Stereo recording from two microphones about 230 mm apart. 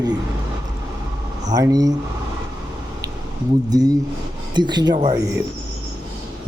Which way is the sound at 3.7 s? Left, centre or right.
Centre.